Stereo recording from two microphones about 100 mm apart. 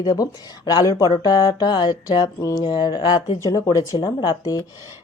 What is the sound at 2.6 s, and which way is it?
Music, 45° left (ahead or behind).